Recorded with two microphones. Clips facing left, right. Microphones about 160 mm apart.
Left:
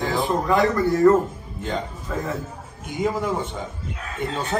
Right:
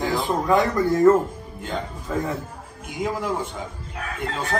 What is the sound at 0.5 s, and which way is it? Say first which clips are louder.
Speech: right 1 dB; 20° right (ahead or behind).